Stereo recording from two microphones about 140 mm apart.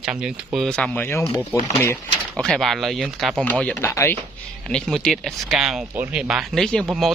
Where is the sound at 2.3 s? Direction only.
Centre (ahead or behind).